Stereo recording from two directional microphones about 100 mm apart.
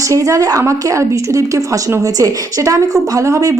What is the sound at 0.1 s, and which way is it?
A woman's voice, 30° right (ahead or behind).